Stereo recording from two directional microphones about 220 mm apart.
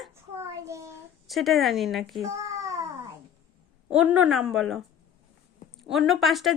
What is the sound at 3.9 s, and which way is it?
Speech, 5° right (ahead or behind).